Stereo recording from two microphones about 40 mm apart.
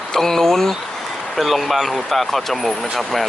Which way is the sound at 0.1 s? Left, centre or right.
Centre.